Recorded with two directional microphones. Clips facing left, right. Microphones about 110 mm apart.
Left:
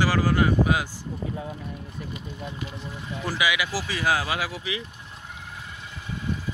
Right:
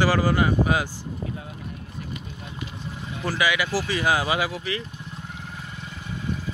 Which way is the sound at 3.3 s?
5° left (ahead or behind).